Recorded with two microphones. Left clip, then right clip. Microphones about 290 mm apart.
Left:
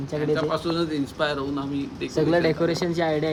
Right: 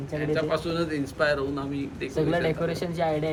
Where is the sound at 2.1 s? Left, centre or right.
Left.